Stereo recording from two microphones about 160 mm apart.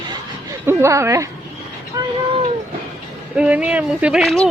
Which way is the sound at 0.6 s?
15° right (ahead or behind).